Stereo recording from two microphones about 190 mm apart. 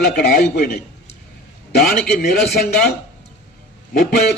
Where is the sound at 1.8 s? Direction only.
55° left (ahead or behind).